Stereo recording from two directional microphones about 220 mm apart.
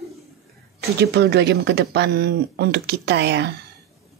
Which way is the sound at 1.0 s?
50° right (ahead or behind).